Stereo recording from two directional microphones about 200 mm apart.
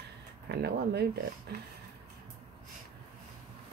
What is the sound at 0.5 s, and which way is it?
Speech, 55° right (ahead or behind).